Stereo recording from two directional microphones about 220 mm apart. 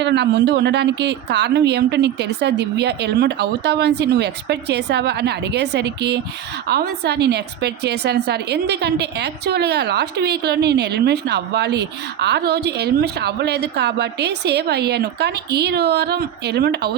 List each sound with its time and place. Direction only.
0.0 s a woman's voice: 50° right (ahead or behind)